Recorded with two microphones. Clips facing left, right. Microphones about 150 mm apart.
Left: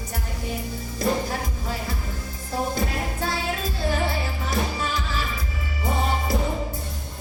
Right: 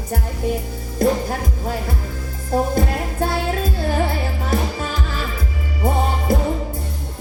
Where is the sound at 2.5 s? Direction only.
50° right (ahead or behind).